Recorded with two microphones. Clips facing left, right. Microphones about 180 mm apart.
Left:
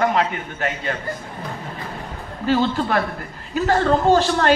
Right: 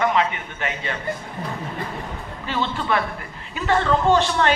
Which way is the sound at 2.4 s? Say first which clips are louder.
Left 5 dB; 40° left (ahead or behind).